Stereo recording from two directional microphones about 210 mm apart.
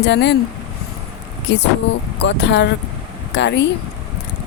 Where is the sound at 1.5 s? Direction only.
55° left (ahead or behind).